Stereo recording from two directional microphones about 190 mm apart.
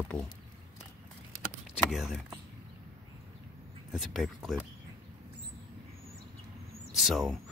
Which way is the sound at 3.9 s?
Centre (ahead or behind).